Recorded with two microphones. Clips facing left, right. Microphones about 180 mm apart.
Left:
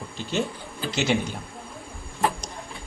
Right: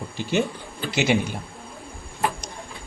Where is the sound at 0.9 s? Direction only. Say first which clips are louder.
Right 2 dB; 10° right (ahead or behind).